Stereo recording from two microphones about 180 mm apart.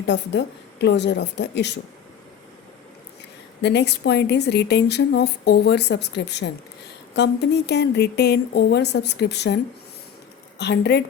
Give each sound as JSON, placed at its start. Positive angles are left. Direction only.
{"t": 0.0, "sound": "a woman's voice", "side_deg": 75}
{"t": 3.6, "sound": "a woman's voice", "side_deg": 70}
{"t": 10.6, "sound": "speech", "side_deg": 65}